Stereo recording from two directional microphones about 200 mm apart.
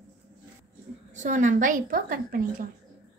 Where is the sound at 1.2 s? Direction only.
40° right (ahead or behind).